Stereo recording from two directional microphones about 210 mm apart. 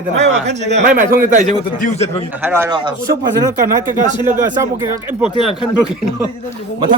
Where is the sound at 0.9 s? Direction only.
40° right (ahead or behind).